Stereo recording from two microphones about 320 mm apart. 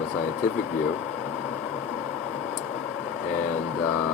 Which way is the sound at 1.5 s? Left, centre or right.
Centre.